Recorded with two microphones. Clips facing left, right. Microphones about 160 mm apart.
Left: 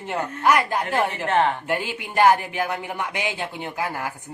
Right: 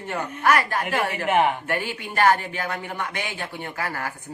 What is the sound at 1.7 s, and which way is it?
Speech, 15° left (ahead or behind).